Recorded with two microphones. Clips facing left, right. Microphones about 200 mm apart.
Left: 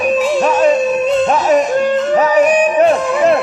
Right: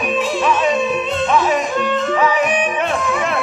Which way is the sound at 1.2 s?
40° left (ahead or behind).